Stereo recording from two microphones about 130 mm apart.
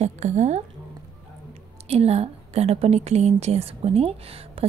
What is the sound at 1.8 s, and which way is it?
A woman's voice, 55° right (ahead or behind).